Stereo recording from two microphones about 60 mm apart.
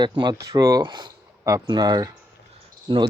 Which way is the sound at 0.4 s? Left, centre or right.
Right.